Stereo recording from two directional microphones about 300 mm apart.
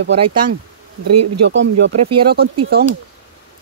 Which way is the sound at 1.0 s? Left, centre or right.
Right.